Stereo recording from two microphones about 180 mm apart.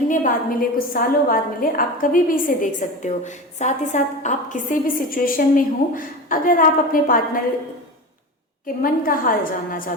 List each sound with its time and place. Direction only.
0.1 s a woman's voice: 50° left (ahead or behind)
8.6 s a woman's voice: 50° left (ahead or behind)